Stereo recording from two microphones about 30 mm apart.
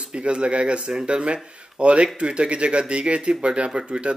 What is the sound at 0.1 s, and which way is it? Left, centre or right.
Speech, right.